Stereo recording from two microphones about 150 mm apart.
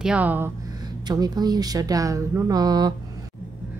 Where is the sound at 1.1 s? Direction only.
25° right (ahead or behind).